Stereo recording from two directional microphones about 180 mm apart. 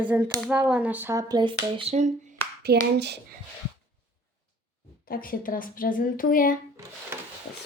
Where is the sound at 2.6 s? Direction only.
65° right (ahead or behind).